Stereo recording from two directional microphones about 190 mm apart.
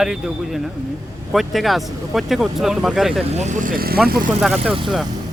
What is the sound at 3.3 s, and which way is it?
Speech, 35° right (ahead or behind).